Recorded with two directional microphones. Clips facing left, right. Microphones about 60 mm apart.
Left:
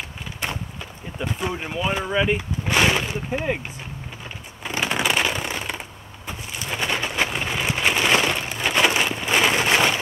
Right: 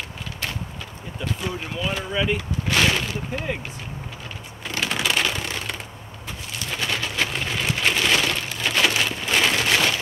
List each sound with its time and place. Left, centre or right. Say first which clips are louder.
1.2 s speech: left 2 dB; left
4.6 s shuffling cards: left 2 dB; left
6.2 s a sound: left 2 dB; left